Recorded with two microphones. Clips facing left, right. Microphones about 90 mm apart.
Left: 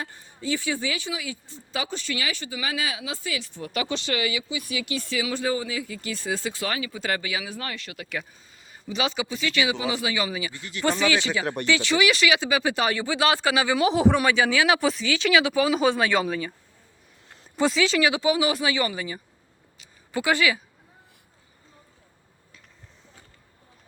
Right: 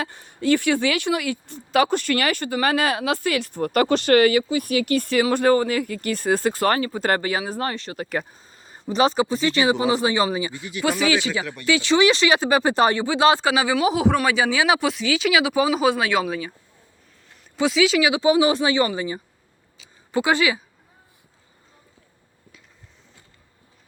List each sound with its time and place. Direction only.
0.0 s a woman's voice: 75° right (ahead or behind); by 10.5 s 30° right (ahead or behind)
10.5 s speech: 10° right (ahead or behind); by 12.3 s 30° right (ahead or behind)
12.3 s speech: 45° right (ahead or behind)
13.0 s speech: 25° right (ahead or behind)
13.8 s a man's voice: 5° right (ahead or behind)
14.3 s speech: 15° right (ahead or behind)
14.8 s speech: 5° right (ahead or behind)
17.6 s speech: 5° right (ahead or behind)
18.3 s speech: 30° right (ahead or behind)